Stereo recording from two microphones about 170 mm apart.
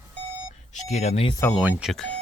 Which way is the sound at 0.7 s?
40° left (ahead or behind).